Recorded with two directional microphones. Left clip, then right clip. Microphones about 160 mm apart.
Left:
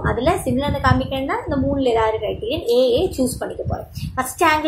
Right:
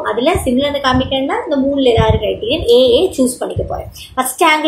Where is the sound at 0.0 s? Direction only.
5° left (ahead or behind).